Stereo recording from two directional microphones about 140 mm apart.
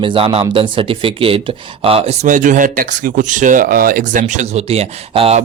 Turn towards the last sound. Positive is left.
turn(degrees=-45)  # may be behind; listen again after turning